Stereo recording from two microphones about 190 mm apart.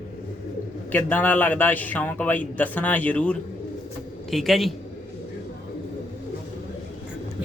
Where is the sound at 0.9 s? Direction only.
10° left (ahead or behind).